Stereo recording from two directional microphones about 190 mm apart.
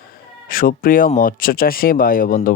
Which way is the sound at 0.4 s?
50° left (ahead or behind).